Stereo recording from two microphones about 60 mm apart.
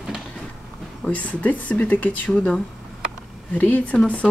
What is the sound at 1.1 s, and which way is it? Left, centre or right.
Speech, left.